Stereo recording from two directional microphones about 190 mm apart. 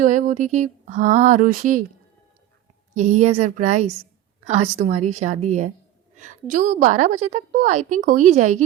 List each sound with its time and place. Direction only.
0.0 s a woman's voice: 40° right (ahead or behind)
2.9 s a woman's voice: 40° right (ahead or behind)